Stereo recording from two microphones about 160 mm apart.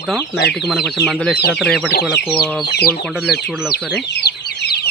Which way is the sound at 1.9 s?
90° left.